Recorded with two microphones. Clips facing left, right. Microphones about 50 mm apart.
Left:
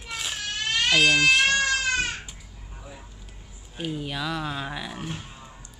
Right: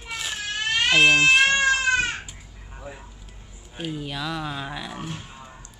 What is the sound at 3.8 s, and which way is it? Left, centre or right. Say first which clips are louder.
Speech: even; centre.